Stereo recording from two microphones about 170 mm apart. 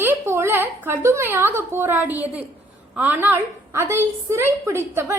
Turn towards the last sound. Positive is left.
turn(degrees=-15)  # may be behind; listen again after turning